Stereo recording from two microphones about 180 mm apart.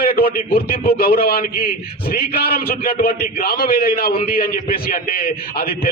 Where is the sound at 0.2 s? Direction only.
55° left (ahead or behind).